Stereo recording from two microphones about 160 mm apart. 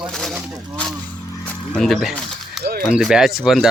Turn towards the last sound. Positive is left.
turn(degrees=0)  # may be behind; listen again after turning